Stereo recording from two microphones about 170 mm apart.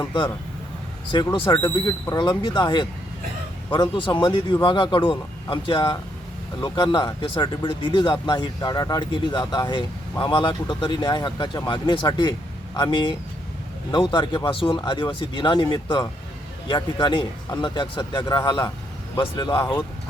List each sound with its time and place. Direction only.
1.1 s speech: 30° left (ahead or behind)